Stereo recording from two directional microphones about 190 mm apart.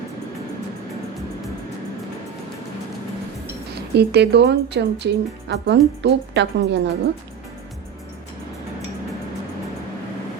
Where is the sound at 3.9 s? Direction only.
60° right (ahead or behind).